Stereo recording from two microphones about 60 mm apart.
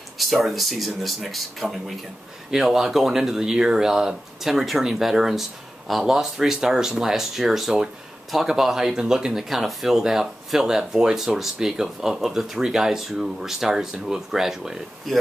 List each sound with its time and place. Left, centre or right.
0.2 s speech: centre